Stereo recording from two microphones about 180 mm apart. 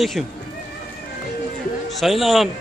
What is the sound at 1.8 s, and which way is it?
Speech, centre (ahead or behind).